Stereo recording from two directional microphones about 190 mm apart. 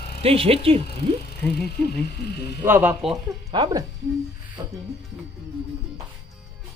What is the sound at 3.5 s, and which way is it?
Speech, 25° right (ahead or behind).